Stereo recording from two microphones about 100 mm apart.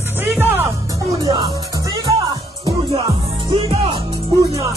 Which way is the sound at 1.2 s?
50° right (ahead or behind).